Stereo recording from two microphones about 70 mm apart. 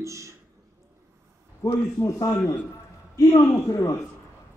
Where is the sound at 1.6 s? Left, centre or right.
Left.